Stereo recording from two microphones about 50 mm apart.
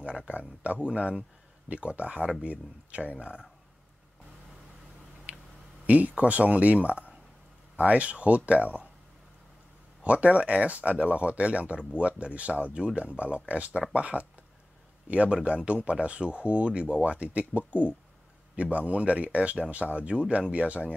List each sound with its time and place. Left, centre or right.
0.3 s speech: right
5.3 s a sound: right
5.9 s speech: right
10.0 s speech: right